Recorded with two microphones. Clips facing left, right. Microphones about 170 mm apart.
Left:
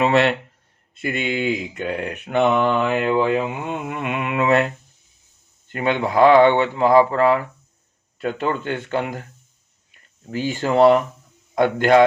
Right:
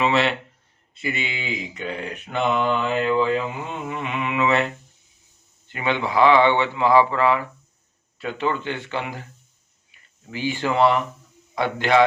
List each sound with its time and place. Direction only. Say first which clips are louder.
0.0 s mantra: left 4 dB; 50° left (ahead or behind)
5.6 s mantra: left 3 dB; 45° left (ahead or behind)
9.9 s speech: left 6 dB; 45° left (ahead or behind)
11.5 s mantra: left 4 dB; 50° left (ahead or behind)